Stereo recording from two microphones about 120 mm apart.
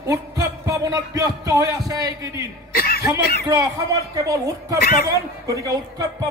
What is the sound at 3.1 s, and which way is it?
Speech, 30° right (ahead or behind).